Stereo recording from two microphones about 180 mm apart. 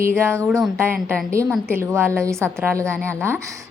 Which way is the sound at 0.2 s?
15° right (ahead or behind).